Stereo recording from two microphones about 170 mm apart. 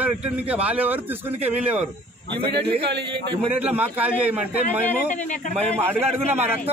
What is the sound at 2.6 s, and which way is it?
Speech, 85° right.